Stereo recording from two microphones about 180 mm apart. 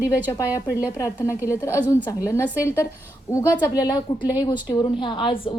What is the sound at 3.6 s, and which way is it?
A woman's voice, 20° left (ahead or behind).